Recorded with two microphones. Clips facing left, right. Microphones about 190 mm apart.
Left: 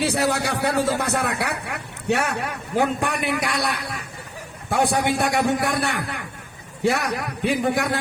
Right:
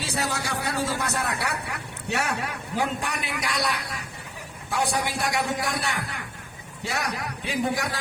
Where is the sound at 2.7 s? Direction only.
55° left (ahead or behind).